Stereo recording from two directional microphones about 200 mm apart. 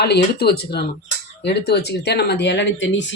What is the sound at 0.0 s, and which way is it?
Speech, 55° left (ahead or behind).